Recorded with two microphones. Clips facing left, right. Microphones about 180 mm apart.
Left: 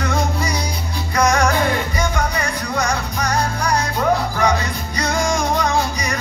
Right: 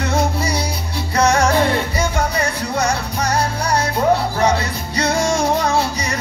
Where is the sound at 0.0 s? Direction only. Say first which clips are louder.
Right 2 dB; 30° right (ahead or behind).